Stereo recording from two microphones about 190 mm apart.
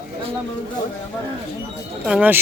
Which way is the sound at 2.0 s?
5° right (ahead or behind).